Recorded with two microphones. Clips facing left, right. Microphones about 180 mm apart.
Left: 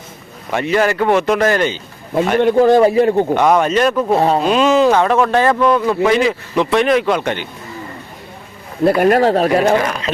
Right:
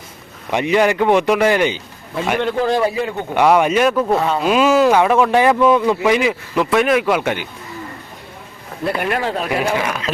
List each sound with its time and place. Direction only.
0.5 s speech: 15° right (ahead or behind)
2.6 s speech: 45° left (ahead or behind)
2.8 s speech: 35° left (ahead or behind)
3.3 s speech: 10° right (ahead or behind)
4.1 s speech: 35° left (ahead or behind)
4.4 s speech: 10° right (ahead or behind)
8.8 s speech: 45° left (ahead or behind)
9.6 s speech: 10° right (ahead or behind)